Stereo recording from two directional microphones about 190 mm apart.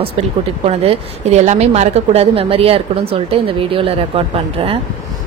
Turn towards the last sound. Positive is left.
turn(degrees=-30)  # may be behind; listen again after turning